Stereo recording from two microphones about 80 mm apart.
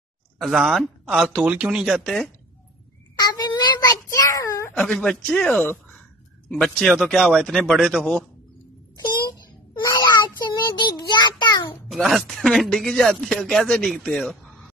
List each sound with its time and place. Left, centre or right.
0.4 s speech: centre
3.2 s cat: left
4.1 s a child's voice: left
4.7 s speech: centre
9.8 s child singing: left
10.1 s child singing: left
11.9 s speech: centre